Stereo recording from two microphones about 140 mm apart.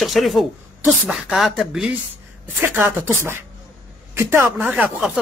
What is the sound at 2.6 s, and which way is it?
A man's voice, 15° right (ahead or behind).